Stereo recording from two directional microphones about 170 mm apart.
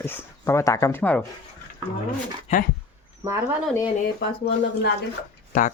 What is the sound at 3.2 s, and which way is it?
Speech, 20° right (ahead or behind).